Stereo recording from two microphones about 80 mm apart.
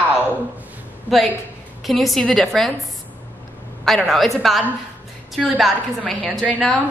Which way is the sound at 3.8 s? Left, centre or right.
Centre.